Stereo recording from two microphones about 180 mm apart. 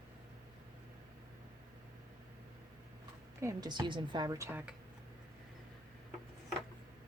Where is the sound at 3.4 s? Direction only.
20° right (ahead or behind).